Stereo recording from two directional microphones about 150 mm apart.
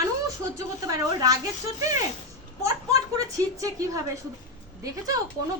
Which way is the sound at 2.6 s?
25° right (ahead or behind).